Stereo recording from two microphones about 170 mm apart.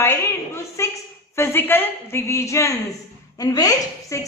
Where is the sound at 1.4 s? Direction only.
15° left (ahead or behind).